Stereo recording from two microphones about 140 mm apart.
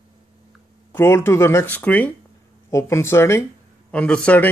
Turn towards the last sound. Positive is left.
turn(degrees=10)  # may be behind; listen again after turning